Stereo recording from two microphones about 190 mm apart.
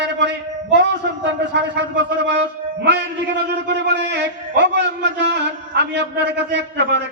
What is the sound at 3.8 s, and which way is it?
A man's voice, 65° right (ahead or behind).